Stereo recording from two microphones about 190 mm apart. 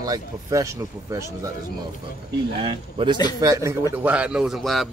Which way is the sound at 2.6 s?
25° right (ahead or behind).